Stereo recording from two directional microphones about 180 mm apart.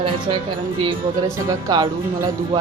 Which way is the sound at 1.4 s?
25° right (ahead or behind).